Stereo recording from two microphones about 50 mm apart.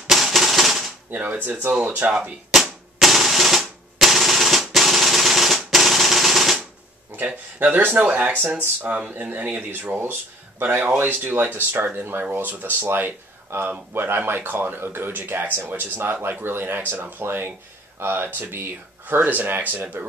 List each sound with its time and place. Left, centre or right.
0.1 s typewriter: centre
1.1 s speech: right
2.5 s a sound: centre
7.7 s speech: right
12.8 s speech: right
19.2 s speech: right